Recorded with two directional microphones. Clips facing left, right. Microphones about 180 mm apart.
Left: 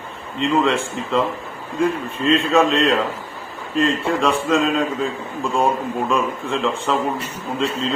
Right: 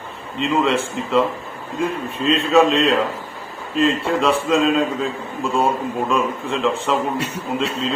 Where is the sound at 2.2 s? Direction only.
Centre (ahead or behind).